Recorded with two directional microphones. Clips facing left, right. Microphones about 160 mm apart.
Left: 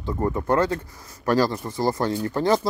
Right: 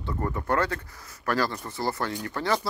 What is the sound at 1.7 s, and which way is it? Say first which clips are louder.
Speech: left 6 dB; 15° left (ahead or behind).